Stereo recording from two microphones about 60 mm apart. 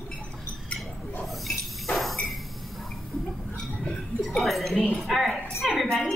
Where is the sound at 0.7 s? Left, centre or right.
Centre.